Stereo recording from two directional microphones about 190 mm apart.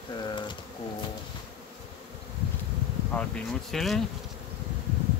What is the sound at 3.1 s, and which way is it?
Speech, 5° left (ahead or behind).